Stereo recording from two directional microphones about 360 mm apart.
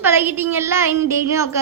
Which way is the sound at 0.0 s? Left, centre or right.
Centre.